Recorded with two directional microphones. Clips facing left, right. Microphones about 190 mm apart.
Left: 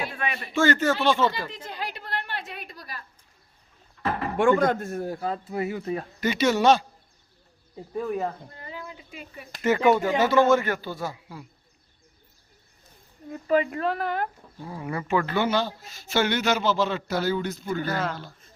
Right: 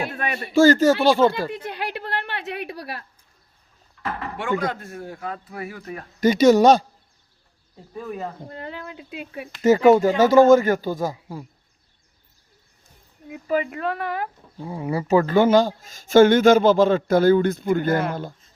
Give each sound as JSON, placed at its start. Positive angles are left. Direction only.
{"t": 0.0, "sound": "a man's voice", "side_deg": -45}
{"t": 1.3, "sound": "a woman's voice", "side_deg": -60}
{"t": 4.4, "sound": "speech", "side_deg": 50}
{"t": 6.1, "sound": "a man's voice", "side_deg": -40}
{"t": 7.9, "sound": "speech", "side_deg": 5}
{"t": 8.4, "sound": "speech", "side_deg": -70}
{"t": 9.6, "sound": "a man's voice", "side_deg": -40}
{"t": 13.2, "sound": "speech", "side_deg": -5}
{"t": 14.6, "sound": "speech", "side_deg": -25}
{"t": 15.0, "sound": "speech", "side_deg": -40}